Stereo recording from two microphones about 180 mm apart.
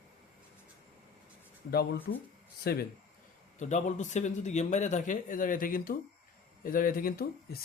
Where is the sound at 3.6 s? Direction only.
40° left (ahead or behind).